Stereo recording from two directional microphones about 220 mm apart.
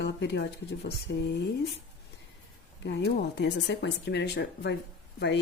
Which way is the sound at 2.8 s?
50° left (ahead or behind).